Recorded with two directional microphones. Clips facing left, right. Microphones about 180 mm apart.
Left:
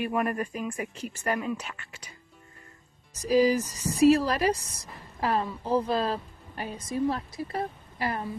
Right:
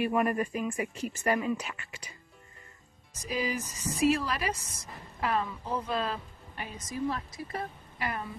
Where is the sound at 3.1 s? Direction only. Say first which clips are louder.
Left 10 dB; 35° left (ahead or behind).